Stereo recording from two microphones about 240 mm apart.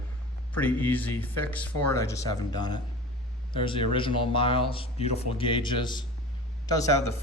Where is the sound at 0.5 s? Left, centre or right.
Centre.